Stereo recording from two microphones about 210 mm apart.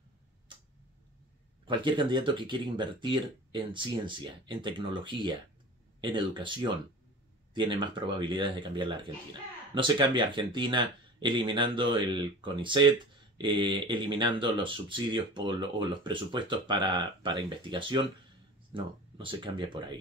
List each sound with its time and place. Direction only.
1.7 s speech: 20° right (ahead or behind)
5.9 s a sound: 20° right (ahead or behind)
6.3 s speech: 20° right (ahead or behind)